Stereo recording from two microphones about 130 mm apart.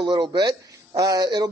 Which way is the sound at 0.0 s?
35° right (ahead or behind).